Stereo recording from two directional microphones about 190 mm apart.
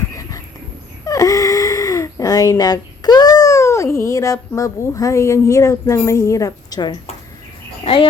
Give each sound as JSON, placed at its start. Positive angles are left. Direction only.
{"t": 1.0, "sound": "speech", "side_deg": 20}